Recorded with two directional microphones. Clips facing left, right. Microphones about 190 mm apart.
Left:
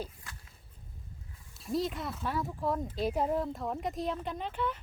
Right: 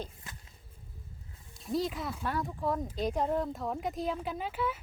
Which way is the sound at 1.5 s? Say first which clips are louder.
Even; centre (ahead or behind).